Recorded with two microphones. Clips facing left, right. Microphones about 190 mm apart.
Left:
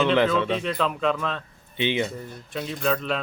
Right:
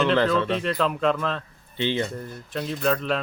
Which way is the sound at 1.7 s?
15° left (ahead or behind).